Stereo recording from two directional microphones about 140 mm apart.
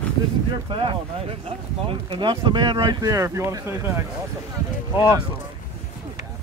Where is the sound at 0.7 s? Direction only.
40° right (ahead or behind); by 4.0 s 20° right (ahead or behind).